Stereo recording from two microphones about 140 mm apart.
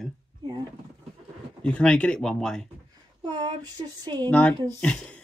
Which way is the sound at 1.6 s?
10° left (ahead or behind).